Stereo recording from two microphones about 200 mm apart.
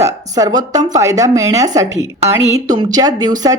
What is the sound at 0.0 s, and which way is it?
Speech, 15° right (ahead or behind).